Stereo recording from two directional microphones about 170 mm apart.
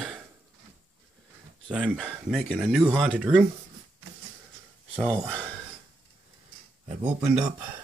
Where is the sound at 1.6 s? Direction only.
5° right (ahead or behind).